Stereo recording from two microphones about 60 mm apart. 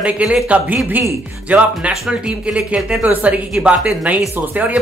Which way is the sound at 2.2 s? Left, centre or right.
Centre.